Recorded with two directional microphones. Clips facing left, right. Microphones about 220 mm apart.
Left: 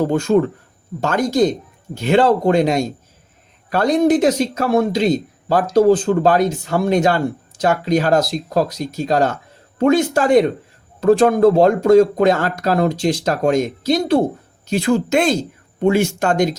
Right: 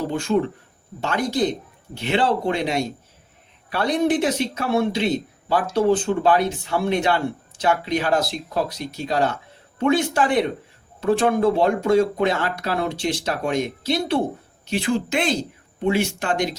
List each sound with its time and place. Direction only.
0.0 s speech: 45° left (ahead or behind)